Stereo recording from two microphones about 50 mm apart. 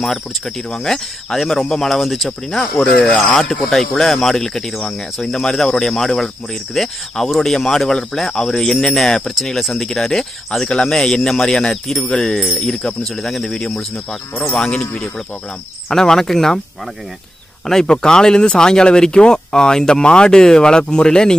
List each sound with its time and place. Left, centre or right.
0.0 s speech: centre
3.1 s speech: centre
17.6 s speech: centre